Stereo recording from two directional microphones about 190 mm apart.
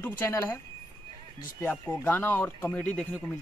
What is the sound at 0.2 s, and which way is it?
Speech, 15° left (ahead or behind).